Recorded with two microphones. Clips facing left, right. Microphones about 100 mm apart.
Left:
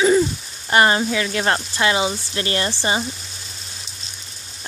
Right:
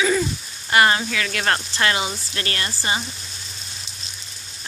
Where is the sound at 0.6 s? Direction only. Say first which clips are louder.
Left 2 dB; 25° left (ahead or behind).